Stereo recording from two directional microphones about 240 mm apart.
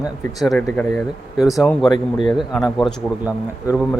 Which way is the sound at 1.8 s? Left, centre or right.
Centre.